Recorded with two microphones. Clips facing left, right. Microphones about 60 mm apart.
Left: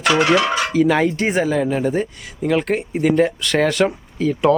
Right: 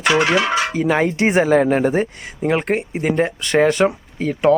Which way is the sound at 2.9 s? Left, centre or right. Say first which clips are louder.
Left 3 dB; centre.